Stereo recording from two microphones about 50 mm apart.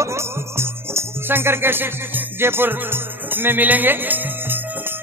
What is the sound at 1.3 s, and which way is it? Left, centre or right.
Music, right.